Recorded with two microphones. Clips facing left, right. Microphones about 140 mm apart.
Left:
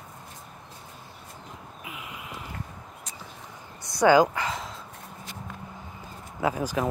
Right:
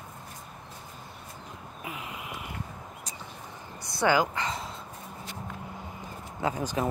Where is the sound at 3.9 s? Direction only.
20° left (ahead or behind).